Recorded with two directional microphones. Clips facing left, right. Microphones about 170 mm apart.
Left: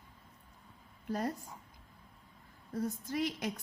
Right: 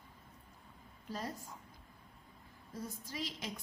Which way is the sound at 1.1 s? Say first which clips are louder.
Left 7 dB; 55° left (ahead or behind).